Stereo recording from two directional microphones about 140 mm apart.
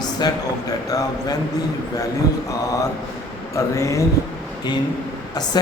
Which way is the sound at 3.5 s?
20° left (ahead or behind).